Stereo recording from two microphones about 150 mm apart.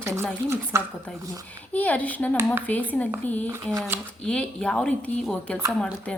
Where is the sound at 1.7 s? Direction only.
10° left (ahead or behind).